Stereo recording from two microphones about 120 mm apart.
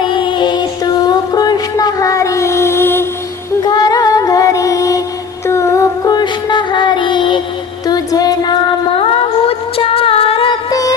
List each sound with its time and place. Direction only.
0.0 s music: 45° left (ahead or behind); by 3.1 s 20° left (ahead or behind)
3.6 s music: 35° left (ahead or behind)
9.5 s music: 55° left (ahead or behind)
10.7 s music: 30° left (ahead or behind)